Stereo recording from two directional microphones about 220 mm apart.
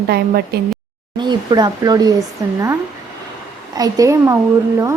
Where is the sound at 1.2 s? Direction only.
20° right (ahead or behind).